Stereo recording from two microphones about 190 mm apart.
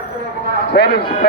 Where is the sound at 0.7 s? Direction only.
55° left (ahead or behind).